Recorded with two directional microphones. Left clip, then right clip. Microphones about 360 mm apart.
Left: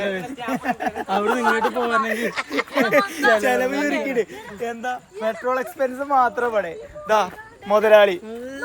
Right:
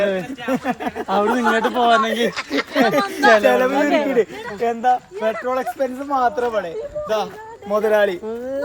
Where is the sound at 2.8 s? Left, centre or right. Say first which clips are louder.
Right 3 dB; centre.